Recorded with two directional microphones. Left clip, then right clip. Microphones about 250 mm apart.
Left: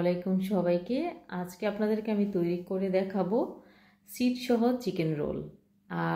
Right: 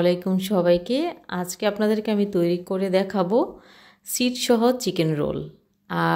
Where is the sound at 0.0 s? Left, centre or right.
Right.